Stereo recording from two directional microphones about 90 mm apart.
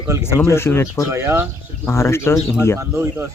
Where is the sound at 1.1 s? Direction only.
30° right (ahead or behind).